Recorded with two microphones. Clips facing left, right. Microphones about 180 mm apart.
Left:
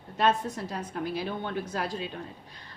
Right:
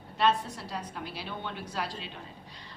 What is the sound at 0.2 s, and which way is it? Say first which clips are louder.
A woman's voice: left 1 dB; 45° left (ahead or behind).